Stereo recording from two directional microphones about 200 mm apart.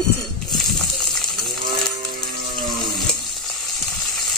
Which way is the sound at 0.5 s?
Centre (ahead or behind).